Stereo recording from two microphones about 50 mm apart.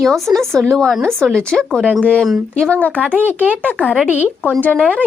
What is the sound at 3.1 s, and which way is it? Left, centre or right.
Speech, right.